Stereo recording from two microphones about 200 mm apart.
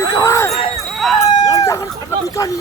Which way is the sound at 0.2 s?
15° left (ahead or behind).